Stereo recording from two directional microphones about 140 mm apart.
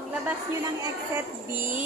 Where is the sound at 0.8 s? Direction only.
20° right (ahead or behind).